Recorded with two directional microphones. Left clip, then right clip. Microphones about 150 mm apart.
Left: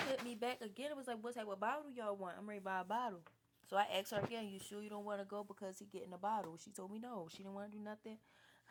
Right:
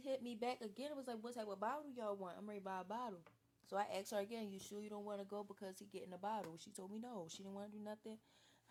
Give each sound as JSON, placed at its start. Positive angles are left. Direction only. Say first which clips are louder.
{"t": 0.3, "sound": "speech", "louder": "left 2 dB", "side_deg": 0}
{"t": 2.6, "sound": "speech", "louder": "left 6 dB", "side_deg": 25}
{"t": 4.1, "sound": "speech", "louder": "left 2 dB", "side_deg": 0}
{"t": 5.5, "sound": "speech", "louder": "left 3 dB", "side_deg": 20}
{"t": 6.9, "sound": "speech", "louder": "left 2 dB", "side_deg": 5}